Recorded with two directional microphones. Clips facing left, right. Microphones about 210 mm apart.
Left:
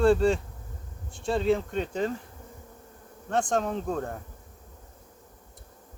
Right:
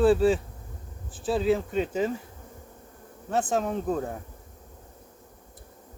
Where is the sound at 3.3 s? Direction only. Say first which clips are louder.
Even; 5° right (ahead or behind).